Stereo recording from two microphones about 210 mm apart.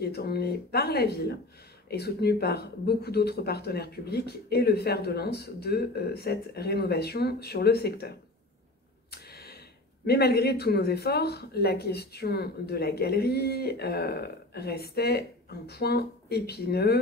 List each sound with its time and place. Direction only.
0.0 s speech: 50° left (ahead or behind)
9.1 s a sound: 50° left (ahead or behind)
10.0 s speech: 50° left (ahead or behind)